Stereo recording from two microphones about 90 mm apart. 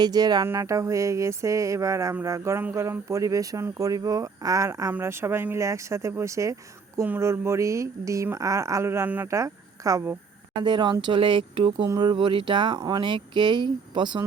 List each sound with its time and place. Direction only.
0.0 s speech: 50° right (ahead or behind)
0.4 s speech: 35° right (ahead or behind)
4.9 s speech: 25° right (ahead or behind)
9.3 s a woman's voice: 35° right (ahead or behind)
10.6 s speech: 55° right (ahead or behind)